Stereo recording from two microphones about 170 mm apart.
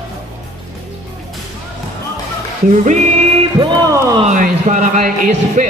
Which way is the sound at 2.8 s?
45° right (ahead or behind).